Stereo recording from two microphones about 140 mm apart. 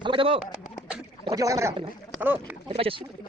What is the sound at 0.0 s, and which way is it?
Pigeon, 40° right (ahead or behind).